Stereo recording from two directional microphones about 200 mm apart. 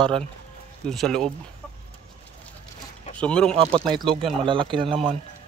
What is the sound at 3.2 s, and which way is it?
Speech, 5° left (ahead or behind).